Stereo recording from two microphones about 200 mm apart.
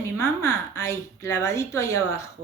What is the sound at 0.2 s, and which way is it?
A woman's voice, 15° left (ahead or behind).